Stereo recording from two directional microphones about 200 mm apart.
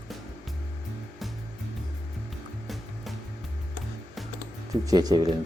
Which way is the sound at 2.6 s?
Centre (ahead or behind).